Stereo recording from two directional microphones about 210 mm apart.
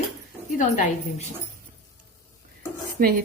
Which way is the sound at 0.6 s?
35° left (ahead or behind).